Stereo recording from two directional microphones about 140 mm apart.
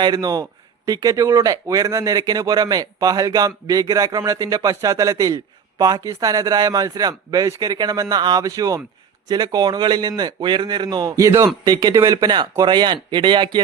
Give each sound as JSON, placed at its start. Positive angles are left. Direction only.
{"t": 0.0, "sound": "speech", "side_deg": -30}